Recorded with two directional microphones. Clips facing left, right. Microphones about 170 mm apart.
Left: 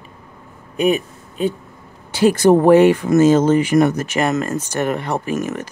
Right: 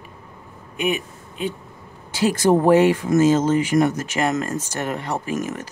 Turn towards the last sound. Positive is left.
turn(degrees=65)  # may be behind; listen again after turning